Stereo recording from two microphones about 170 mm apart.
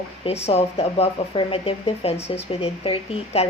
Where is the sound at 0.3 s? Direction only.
35° left (ahead or behind).